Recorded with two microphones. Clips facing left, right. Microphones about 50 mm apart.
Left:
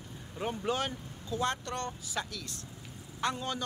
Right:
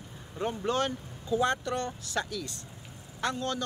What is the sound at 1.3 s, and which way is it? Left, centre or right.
Speech, centre.